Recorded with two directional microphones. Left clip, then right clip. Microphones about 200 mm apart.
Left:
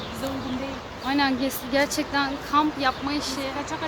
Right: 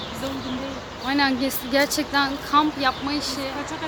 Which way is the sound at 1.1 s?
5° right (ahead or behind).